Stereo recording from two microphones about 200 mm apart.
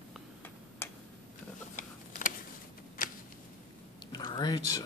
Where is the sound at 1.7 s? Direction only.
40° left (ahead or behind).